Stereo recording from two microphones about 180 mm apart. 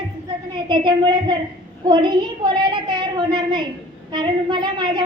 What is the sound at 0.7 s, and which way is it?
A woman's voice, 25° right (ahead or behind).